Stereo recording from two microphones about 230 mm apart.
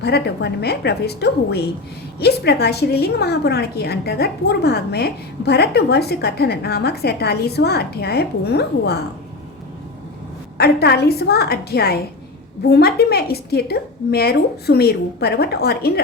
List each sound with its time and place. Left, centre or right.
0.0 s a woman's voice: left
10.6 s a woman's voice: left